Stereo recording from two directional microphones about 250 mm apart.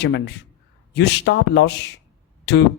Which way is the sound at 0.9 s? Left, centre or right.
Left.